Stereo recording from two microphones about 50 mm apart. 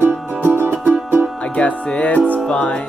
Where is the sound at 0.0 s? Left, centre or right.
Right.